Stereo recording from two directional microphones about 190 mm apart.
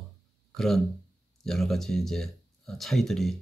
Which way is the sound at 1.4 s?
Centre (ahead or behind).